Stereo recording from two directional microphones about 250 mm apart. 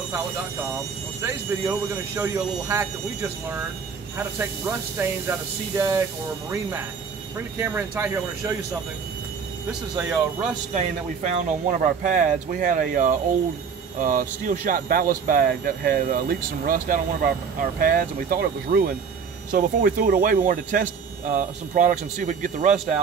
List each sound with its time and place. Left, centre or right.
1.2 s speech: centre
7.5 s speech: centre
9.7 s speech: centre
10.7 s speech: right